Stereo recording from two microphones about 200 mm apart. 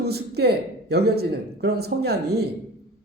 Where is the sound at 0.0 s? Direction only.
55° right (ahead or behind).